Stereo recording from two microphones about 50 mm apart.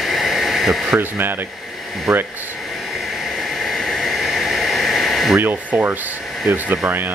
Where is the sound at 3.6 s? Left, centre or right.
Centre.